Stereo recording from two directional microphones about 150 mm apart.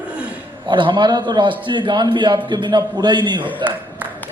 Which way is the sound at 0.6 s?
30° right (ahead or behind).